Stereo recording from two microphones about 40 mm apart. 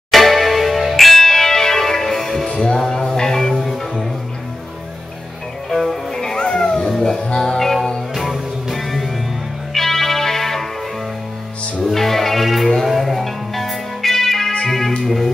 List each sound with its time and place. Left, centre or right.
0.1 s music: centre
2.5 s music: left
2.8 s music: centre
5.8 s music: centre
6.2 s music: centre
11.8 s music: centre